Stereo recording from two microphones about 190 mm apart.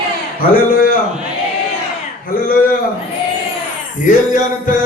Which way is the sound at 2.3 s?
50° left (ahead or behind).